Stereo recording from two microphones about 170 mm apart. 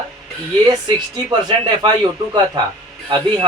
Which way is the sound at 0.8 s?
25° right (ahead or behind).